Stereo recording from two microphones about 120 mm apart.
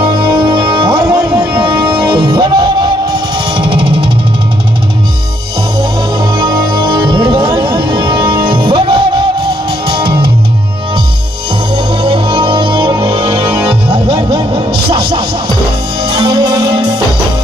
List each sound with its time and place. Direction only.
0.0 s music: 35° right (ahead or behind)
6.3 s music: 35° right (ahead or behind)
11.7 s music: 45° right (ahead or behind)